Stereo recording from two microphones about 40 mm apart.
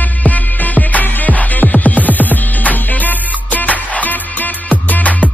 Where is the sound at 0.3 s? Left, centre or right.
Left.